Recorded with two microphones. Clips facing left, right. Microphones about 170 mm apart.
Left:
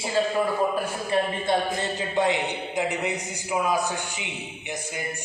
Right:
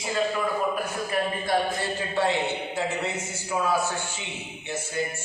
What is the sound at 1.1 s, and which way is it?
A man's voice, 20° left (ahead or behind).